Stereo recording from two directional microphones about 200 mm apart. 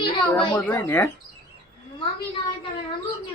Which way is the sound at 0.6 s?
10° left (ahead or behind).